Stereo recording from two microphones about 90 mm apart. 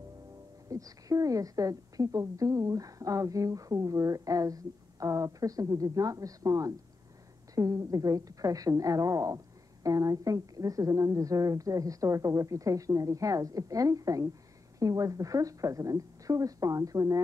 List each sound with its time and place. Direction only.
0.7 s a woman's voice: 40° right (ahead or behind)